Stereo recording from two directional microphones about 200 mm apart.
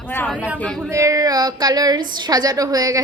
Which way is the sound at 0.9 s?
15° right (ahead or behind).